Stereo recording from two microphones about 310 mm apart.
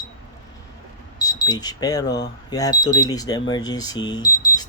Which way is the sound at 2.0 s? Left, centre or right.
Left.